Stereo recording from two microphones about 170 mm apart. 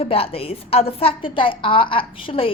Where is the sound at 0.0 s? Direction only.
35° left (ahead or behind).